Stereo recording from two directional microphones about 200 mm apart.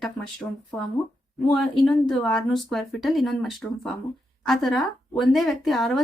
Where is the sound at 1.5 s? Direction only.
Centre (ahead or behind).